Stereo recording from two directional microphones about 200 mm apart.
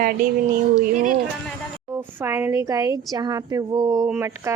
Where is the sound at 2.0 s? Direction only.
10° right (ahead or behind).